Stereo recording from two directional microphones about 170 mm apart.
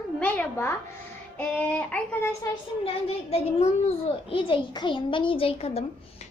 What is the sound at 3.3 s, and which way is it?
A child's voice, 35° left (ahead or behind).